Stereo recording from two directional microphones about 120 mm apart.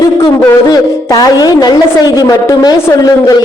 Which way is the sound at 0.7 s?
30° left (ahead or behind).